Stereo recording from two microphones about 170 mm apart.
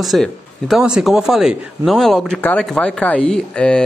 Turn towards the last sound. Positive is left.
turn(degrees=5)  # may be behind; listen again after turning